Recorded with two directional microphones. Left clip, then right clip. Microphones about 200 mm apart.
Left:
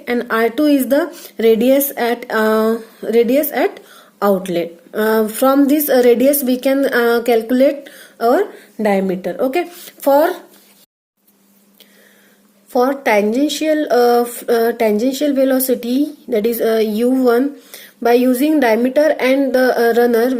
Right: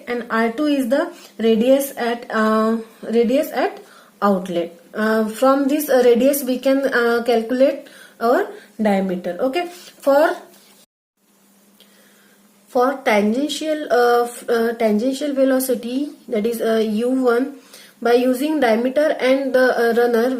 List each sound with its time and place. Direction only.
0.0 s speech: 50° left (ahead or behind)
12.7 s speech: 35° left (ahead or behind)